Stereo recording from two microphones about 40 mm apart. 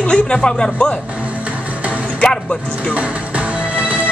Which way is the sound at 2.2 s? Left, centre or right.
Left.